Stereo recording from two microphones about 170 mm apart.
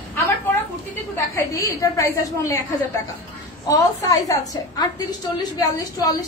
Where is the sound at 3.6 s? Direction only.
20° left (ahead or behind).